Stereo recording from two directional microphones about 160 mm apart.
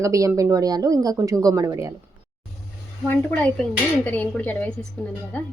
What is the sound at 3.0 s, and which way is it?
Speech, 10° left (ahead or behind).